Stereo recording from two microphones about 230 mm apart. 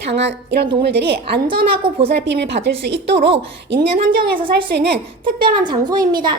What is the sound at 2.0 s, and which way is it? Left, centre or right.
Speech, right.